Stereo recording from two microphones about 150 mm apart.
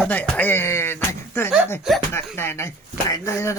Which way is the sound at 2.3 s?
15° left (ahead or behind).